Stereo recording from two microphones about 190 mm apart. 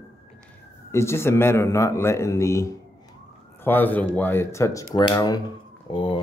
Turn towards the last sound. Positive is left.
turn(degrees=25)  # may be behind; listen again after turning